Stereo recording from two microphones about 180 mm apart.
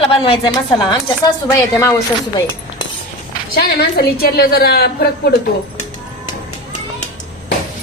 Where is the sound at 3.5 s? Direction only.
60° left (ahead or behind).